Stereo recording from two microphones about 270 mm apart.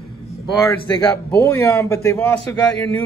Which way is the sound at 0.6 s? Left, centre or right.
Centre.